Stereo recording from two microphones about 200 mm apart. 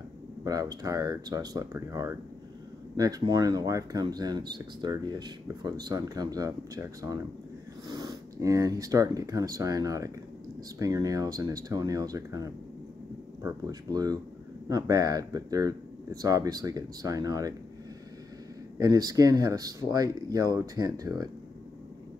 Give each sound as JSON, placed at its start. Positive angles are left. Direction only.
{"t": 0.4, "sound": "speech", "side_deg": -20}
{"t": 18.8, "sound": "speech", "side_deg": -20}